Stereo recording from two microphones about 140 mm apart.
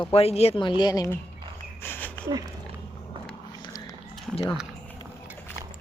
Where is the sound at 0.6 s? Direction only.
35° left (ahead or behind).